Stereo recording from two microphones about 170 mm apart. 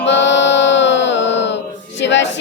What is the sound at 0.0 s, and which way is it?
Music, 90° left.